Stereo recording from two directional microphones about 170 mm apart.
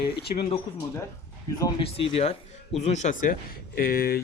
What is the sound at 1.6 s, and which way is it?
Speech, 25° left (ahead or behind).